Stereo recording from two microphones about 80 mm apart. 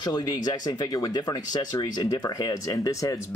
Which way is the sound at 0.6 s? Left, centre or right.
Left.